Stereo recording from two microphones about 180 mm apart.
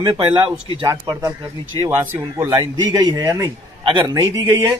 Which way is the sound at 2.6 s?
25° right (ahead or behind).